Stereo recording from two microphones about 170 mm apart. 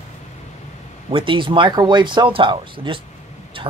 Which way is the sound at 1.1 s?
30° right (ahead or behind).